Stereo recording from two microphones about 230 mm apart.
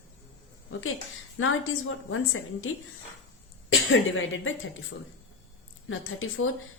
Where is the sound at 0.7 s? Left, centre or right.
Left.